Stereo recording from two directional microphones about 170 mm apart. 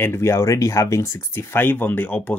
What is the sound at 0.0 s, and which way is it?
Speech, 15° left (ahead or behind).